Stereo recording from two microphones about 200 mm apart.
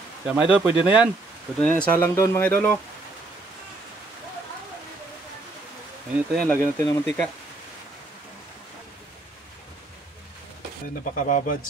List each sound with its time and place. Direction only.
0.3 s speech: 5° right (ahead or behind)
1.6 s speech: 5° left (ahead or behind)
6.1 s speech: 5° left (ahead or behind)
11.2 s speech: 35° left (ahead or behind)